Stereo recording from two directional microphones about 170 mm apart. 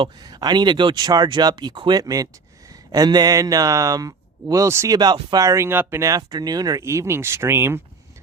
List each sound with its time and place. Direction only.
0.0 s a man's voice: 25° right (ahead or behind)